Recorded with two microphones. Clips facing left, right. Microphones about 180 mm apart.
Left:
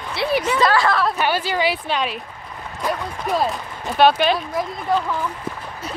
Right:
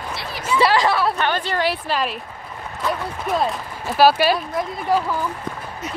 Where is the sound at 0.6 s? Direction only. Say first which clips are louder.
Right 3 dB; 15° right (ahead or behind).